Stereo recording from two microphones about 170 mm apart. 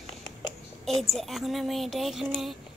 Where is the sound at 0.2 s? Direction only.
25° left (ahead or behind).